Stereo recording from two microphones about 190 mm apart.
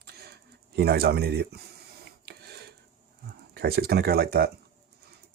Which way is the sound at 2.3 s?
55° right (ahead or behind).